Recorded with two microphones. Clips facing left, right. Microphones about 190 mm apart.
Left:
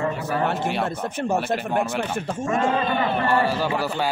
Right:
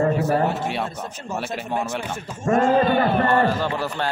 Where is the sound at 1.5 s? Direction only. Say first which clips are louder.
Left 3 dB; 60° left (ahead or behind).